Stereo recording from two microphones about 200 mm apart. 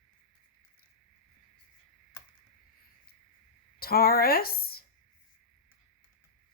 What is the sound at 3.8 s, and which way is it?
A woman's voice, 50° left (ahead or behind).